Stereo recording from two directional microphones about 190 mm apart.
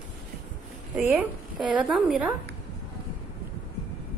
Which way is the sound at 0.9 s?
5° right (ahead or behind).